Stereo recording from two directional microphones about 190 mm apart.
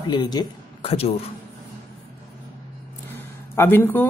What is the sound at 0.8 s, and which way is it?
Speech, 30° left (ahead or behind).